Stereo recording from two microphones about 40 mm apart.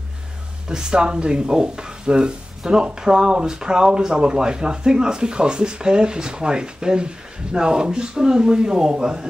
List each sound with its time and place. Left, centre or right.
0.7 s speech: centre